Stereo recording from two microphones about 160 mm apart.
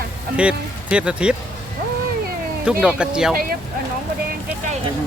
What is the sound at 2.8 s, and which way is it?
Speech, 5° right (ahead or behind).